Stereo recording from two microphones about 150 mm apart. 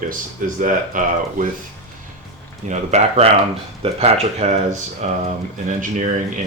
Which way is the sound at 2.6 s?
50° right (ahead or behind).